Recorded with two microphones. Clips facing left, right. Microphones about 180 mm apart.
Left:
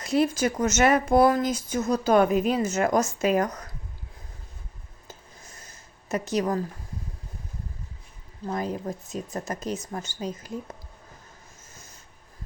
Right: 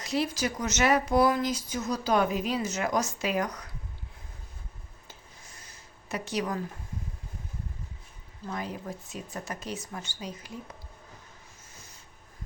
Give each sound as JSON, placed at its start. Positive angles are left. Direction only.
{"t": 0.0, "sound": "speech", "side_deg": 50}
{"t": 6.1, "sound": "speech", "side_deg": 45}
{"t": 8.4, "sound": "speech", "side_deg": 40}